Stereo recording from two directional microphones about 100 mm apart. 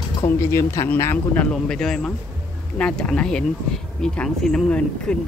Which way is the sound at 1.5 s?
5° left (ahead or behind).